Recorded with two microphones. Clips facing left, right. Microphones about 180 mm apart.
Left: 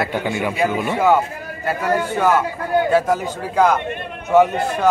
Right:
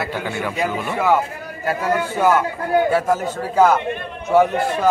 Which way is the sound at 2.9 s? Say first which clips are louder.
Left 1 dB; 5° right (ahead or behind).